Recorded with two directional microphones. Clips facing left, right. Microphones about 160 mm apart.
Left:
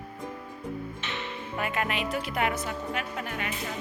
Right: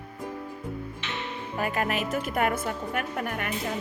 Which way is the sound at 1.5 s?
40° right (ahead or behind).